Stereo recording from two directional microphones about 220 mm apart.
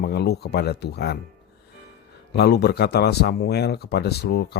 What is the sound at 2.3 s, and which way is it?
Speech, 50° left (ahead or behind).